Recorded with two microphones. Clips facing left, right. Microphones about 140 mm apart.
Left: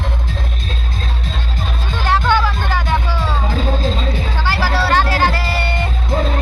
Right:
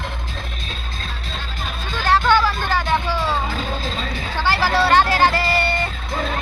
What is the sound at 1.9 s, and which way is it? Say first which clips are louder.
Music: even; 20° left (ahead or behind).